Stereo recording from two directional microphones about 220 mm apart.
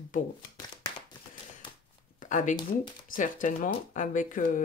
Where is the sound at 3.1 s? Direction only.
35° left (ahead or behind).